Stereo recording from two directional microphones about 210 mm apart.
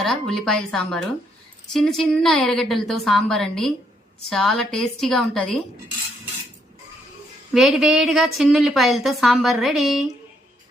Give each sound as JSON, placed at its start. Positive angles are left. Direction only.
{"t": 0.0, "sound": "a woman's voice", "side_deg": 0}
{"t": 7.5, "sound": "a woman's voice", "side_deg": 0}